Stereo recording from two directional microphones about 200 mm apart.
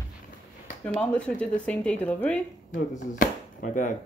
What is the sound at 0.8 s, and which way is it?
A child's voice, 5° left (ahead or behind).